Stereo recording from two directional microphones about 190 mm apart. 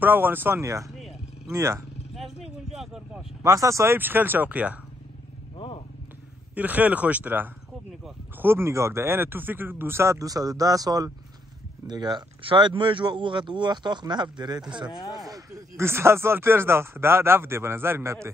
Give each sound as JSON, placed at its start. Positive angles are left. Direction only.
{"t": 0.0, "sound": "speech", "side_deg": -10}
{"t": 2.1, "sound": "vehicle", "side_deg": 0}
{"t": 3.4, "sound": "speech", "side_deg": -15}
{"t": 6.5, "sound": "speech", "side_deg": -10}